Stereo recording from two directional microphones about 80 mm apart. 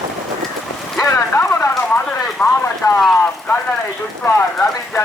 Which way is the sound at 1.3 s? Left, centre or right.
Left.